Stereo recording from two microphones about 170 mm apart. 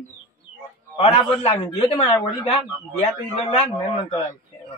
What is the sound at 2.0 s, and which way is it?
Speech, 15° left (ahead or behind).